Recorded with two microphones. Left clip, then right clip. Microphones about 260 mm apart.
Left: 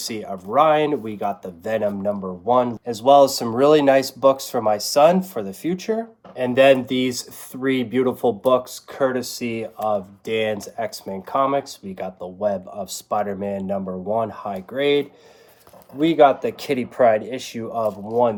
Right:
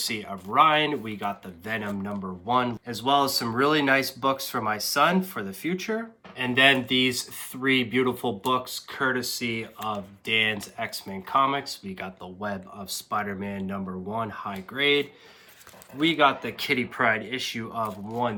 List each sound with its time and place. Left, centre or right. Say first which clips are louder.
0.1 s speech: left 5 dB; right